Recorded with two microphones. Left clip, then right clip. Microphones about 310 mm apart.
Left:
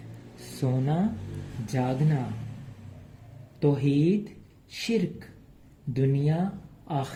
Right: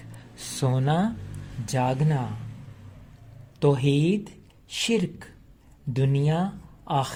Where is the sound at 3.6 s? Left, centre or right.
Right.